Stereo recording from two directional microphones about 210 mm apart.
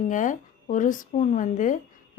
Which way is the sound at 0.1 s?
35° left (ahead or behind).